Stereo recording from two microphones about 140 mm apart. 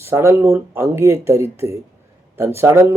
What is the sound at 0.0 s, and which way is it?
Speech, 20° right (ahead or behind).